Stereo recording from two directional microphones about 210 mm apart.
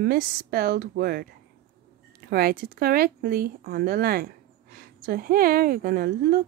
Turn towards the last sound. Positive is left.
turn(degrees=-45)  # may be behind; listen again after turning